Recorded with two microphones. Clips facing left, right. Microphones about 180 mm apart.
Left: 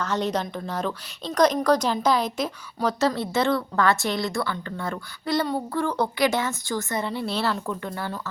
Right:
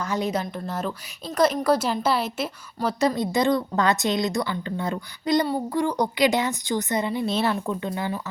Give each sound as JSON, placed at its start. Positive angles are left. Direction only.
{"t": 0.0, "sound": "a woman's voice", "side_deg": -10}